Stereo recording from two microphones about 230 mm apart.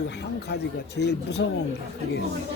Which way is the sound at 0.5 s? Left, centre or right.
Left.